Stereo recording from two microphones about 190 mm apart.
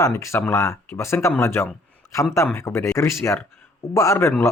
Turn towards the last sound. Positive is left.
turn(degrees=15)  # may be behind; listen again after turning